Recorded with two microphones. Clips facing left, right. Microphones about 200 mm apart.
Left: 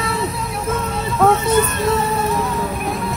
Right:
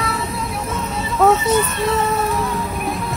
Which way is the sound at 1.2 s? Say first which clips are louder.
Even; centre (ahead or behind).